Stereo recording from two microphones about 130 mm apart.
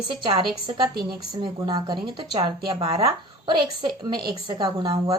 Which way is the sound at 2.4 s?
50° right (ahead or behind).